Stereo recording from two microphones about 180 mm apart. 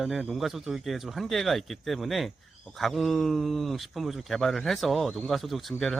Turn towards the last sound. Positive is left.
turn(degrees=0)  # may be behind; listen again after turning